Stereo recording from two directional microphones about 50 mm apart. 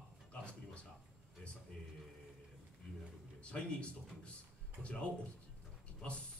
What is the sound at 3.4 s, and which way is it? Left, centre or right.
Speech, left.